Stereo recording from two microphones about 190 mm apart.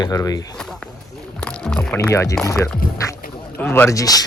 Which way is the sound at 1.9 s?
15° left (ahead or behind).